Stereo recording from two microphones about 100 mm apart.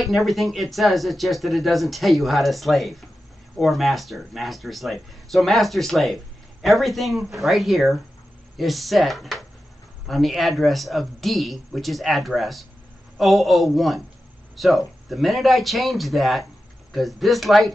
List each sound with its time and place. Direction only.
0.0 s speech: centre (ahead or behind)